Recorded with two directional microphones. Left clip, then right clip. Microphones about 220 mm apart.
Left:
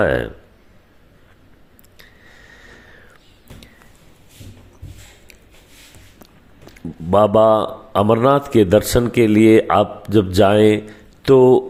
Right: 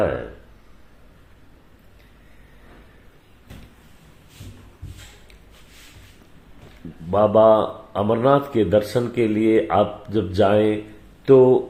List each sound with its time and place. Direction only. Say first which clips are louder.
7.1 s a man's voice: left 2 dB; 30° left (ahead or behind)